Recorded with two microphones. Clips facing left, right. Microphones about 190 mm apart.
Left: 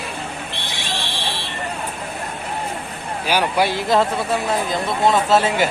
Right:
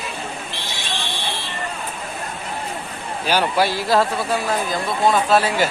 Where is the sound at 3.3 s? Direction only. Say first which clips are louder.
Even; 15° left (ahead or behind).